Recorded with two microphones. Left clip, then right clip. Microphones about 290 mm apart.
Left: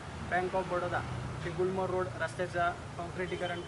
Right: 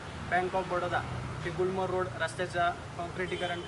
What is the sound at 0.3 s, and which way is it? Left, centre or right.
Speech, centre.